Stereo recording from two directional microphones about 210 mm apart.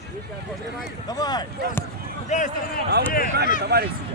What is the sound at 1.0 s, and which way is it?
Speech, 20° left (ahead or behind).